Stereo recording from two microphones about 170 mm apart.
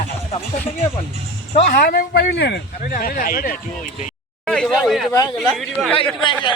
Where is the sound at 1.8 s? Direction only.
65° left (ahead or behind).